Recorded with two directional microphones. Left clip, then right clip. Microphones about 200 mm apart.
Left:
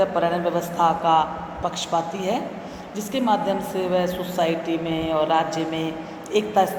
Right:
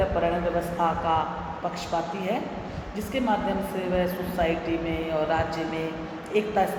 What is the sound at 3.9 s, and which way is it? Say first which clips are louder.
Speech: left 3 dB; 40° left (ahead or behind).